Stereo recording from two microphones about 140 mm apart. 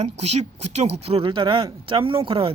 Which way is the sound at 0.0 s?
50° right (ahead or behind).